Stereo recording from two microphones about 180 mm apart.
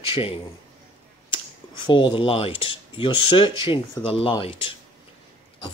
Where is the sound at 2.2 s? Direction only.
30° left (ahead or behind).